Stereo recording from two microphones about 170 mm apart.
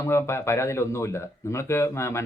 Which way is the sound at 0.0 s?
15° left (ahead or behind).